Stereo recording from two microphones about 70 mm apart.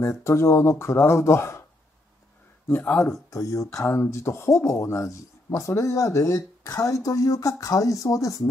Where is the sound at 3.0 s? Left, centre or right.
Left.